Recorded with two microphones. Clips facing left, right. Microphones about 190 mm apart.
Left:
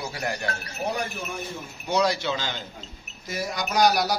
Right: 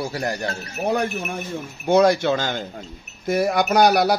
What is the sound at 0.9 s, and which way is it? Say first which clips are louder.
Speech: right 8 dB; 55° right (ahead or behind).